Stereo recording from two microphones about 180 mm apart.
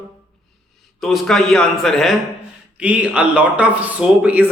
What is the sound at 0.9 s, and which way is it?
A man's voice, centre (ahead or behind).